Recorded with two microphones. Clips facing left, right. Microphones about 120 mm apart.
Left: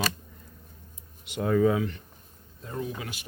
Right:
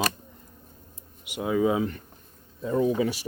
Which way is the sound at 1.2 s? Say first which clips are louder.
Left 1 dB; 10° right (ahead or behind).